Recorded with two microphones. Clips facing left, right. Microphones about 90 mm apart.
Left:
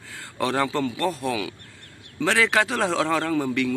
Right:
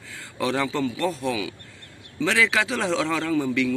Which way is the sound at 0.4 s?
45° left (ahead or behind).